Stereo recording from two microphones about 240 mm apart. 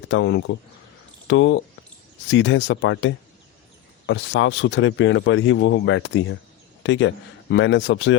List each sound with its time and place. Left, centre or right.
0.1 s a man's voice: left